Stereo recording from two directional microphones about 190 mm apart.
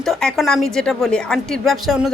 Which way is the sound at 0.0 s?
Centre (ahead or behind).